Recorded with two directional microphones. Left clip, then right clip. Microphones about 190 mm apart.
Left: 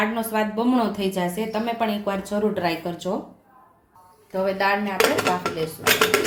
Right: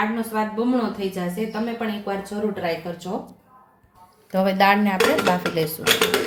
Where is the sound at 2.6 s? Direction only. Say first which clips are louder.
Left 1 dB; 45° left (ahead or behind).